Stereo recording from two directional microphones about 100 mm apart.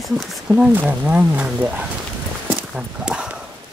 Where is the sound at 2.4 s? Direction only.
10° right (ahead or behind).